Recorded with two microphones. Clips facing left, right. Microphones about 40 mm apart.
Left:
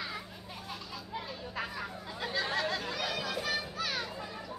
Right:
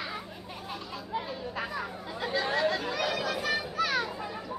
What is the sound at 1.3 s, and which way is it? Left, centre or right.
Chatter, centre.